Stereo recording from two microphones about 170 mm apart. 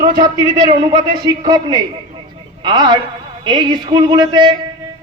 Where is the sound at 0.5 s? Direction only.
25° right (ahead or behind).